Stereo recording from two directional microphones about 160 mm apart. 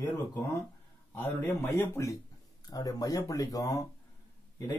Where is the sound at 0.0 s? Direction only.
15° left (ahead or behind).